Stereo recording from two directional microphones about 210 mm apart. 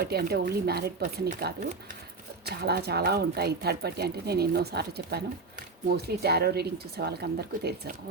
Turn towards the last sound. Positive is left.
turn(degrees=-50)  # may be behind; listen again after turning